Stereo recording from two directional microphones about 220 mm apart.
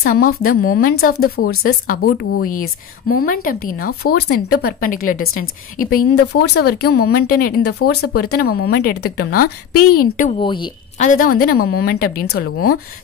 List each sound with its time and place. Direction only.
0.0 s a woman's voice: 40° left (ahead or behind)
1.1 s speech: 80° left
1.6 s a woman's voice: 40° left (ahead or behind)
10.4 s speech: 20° left (ahead or behind)
11.0 s a woman's voice: 35° left (ahead or behind)